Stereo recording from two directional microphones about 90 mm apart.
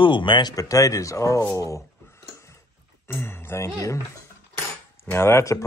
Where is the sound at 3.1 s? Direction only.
25° left (ahead or behind).